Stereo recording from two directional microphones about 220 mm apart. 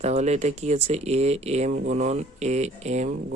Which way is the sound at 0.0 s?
30° right (ahead or behind).